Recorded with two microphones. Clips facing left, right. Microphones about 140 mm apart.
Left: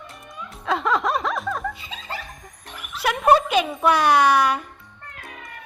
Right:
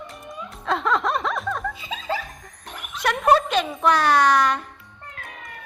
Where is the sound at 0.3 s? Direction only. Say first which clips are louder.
Left 1 dB; centre (ahead or behind).